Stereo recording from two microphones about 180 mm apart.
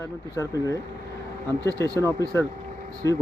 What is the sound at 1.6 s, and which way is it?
Speech, 20° right (ahead or behind).